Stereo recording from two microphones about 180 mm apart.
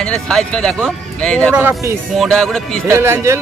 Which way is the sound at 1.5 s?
15° right (ahead or behind).